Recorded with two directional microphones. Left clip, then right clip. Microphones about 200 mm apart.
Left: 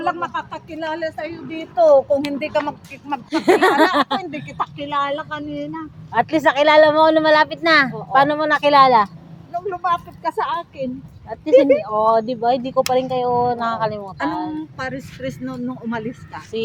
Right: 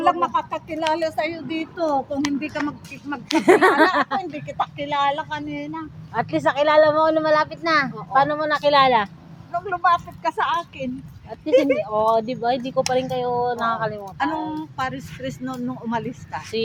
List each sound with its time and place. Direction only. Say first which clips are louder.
0.0 s speech: right 3 dB; 20° right (ahead or behind)
0.9 s a woman's voice: right 3 dB; 40° right (ahead or behind)
1.7 s a child's voice: left 11 dB; 45° left (ahead or behind)
2.4 s speech: left 6 dB; 60° left (ahead or behind)
3.3 s speech: even; 5° right (ahead or behind)
3.6 s speech: left 1 dB; 10° left (ahead or behind)
3.9 s speech: left 3 dB; 30° left (ahead or behind)
4.4 s speech: even; 5° left (ahead or behind)
6.1 s speech: left 5 dB; 35° left (ahead or behind)
8.7 s speech: left 5 dB; 15° left (ahead or behind)
11.9 s speech: left 3 dB; 20° left (ahead or behind)
14.8 s speech: right 2 dB; centre (ahead or behind)
15.2 s speech: left 1 dB; 10° left (ahead or behind)